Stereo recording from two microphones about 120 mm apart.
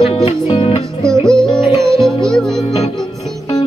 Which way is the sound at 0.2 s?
55° left (ahead or behind).